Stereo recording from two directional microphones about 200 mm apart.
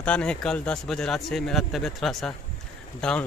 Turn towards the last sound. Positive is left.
turn(degrees=5)  # may be behind; listen again after turning